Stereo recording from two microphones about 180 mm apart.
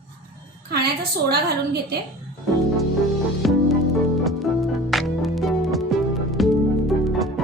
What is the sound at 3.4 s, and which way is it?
Music, centre (ahead or behind).